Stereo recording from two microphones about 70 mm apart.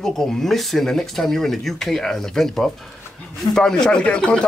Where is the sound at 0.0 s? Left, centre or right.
Centre.